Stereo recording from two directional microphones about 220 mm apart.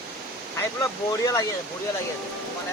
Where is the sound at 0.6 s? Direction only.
15° left (ahead or behind).